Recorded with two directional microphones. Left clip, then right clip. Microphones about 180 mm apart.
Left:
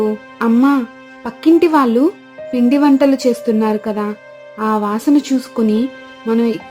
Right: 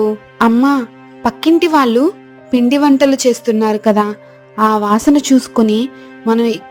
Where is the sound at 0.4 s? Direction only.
35° right (ahead or behind).